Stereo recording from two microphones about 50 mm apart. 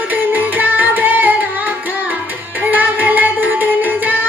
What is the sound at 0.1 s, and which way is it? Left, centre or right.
Music, right.